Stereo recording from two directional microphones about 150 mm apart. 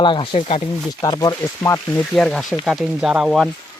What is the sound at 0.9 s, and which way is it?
Speech, 25° left (ahead or behind).